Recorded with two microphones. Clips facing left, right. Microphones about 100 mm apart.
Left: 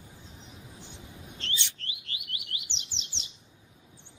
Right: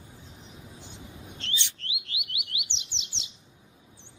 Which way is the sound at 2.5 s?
Centre (ahead or behind).